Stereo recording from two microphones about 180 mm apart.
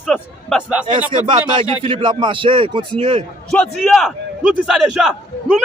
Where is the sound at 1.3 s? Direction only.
30° right (ahead or behind).